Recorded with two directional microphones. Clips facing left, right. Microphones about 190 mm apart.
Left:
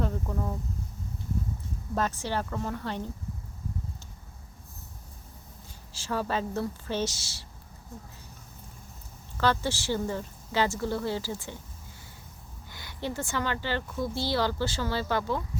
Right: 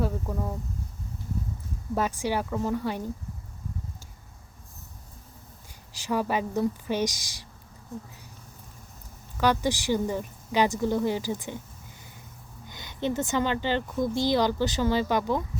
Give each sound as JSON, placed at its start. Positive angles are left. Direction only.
{"t": 0.0, "sound": "speech", "side_deg": -10}
{"t": 2.0, "sound": "speech", "side_deg": -10}
{"t": 5.9, "sound": "speech", "side_deg": -15}
{"t": 9.4, "sound": "speech", "side_deg": -15}
{"t": 12.6, "sound": "speech", "side_deg": -20}